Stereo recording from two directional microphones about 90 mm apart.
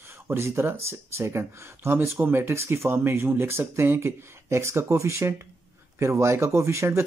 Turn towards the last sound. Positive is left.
turn(degrees=-30)  # may be behind; listen again after turning